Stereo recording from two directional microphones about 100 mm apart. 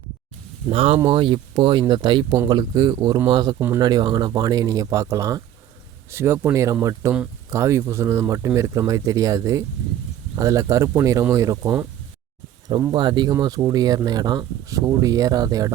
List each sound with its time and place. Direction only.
0.7 s speech: 70° right (ahead or behind); by 11.7 s 35° right (ahead or behind)
12.9 s speech: 50° right (ahead or behind)